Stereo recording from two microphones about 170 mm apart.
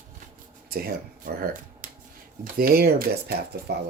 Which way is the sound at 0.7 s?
65° right (ahead or behind).